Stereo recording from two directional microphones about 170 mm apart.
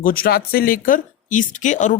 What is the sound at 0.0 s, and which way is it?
Speech, 60° left (ahead or behind).